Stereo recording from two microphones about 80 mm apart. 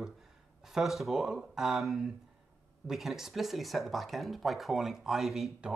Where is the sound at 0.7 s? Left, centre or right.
Centre.